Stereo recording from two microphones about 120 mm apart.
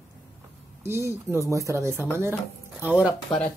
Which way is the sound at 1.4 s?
25° right (ahead or behind).